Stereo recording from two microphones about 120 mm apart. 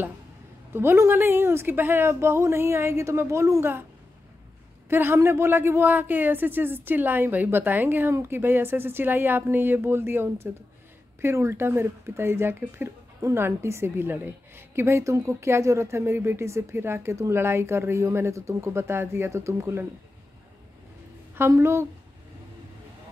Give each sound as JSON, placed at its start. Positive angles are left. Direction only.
{"t": 0.7, "sound": "speech", "side_deg": -20}
{"t": 4.8, "sound": "a woman's voice", "side_deg": -20}
{"t": 21.4, "sound": "speech", "side_deg": -25}